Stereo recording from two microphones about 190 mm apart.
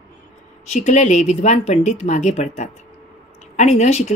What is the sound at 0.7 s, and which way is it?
A woman's voice, 40° left (ahead or behind).